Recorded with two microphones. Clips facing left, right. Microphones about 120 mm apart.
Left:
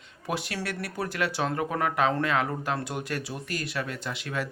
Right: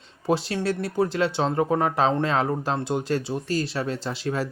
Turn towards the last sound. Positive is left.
turn(degrees=-30)  # may be behind; listen again after turning